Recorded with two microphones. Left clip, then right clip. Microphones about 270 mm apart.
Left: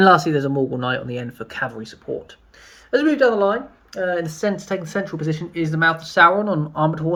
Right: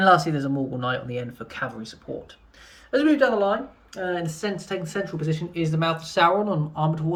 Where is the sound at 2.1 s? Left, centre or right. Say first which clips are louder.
Left 7 dB; left.